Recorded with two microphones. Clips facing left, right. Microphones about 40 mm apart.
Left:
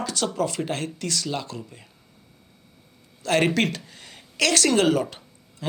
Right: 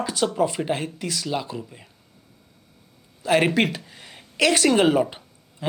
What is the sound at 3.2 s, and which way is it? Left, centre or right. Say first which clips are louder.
A man's voice: right 2 dB; centre.